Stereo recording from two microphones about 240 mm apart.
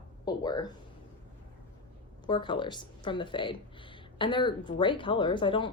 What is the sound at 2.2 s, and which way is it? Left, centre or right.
A woman's voice, centre.